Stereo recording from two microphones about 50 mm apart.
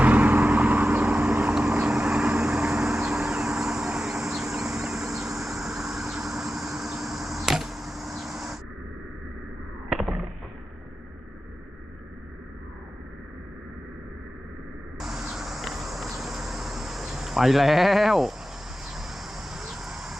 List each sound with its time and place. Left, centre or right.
0.0 s vehicle: right; by 8.1 s centre
8.2 s a sound: centre
9.9 s arrow: centre
14.9 s insect: centre
18.9 s vehicle: centre